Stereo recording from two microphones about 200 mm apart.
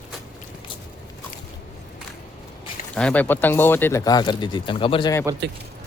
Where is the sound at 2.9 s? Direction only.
5° left (ahead or behind).